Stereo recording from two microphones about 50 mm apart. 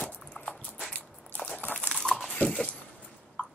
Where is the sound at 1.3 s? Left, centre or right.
Left.